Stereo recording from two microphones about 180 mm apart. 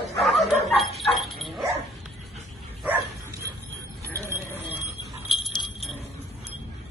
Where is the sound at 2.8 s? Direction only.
10° right (ahead or behind).